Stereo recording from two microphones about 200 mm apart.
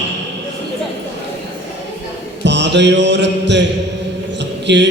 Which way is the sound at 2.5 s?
60° right (ahead or behind).